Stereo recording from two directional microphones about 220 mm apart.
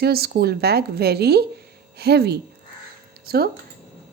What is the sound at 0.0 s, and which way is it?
A woman's voice, 45° right (ahead or behind).